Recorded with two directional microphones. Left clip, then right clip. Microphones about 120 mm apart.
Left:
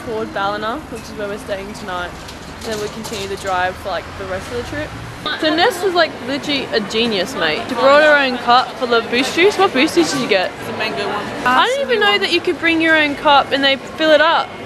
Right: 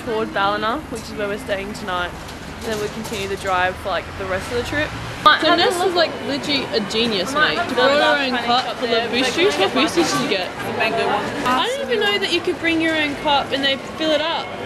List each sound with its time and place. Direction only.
0.3 s a woman's voice: 5° left (ahead or behind)
4.3 s speech: 10° right (ahead or behind)
5.6 s a woman's voice: 15° left (ahead or behind)